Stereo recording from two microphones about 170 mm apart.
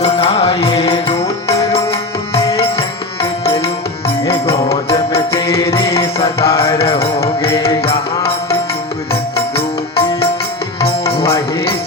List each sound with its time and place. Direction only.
0.0 s music: 35° left (ahead or behind)
4.3 s music: 35° left (ahead or behind)
5.3 s music: 15° left (ahead or behind)
6.1 s music: 35° left (ahead or behind)
9.6 s music: 35° left (ahead or behind)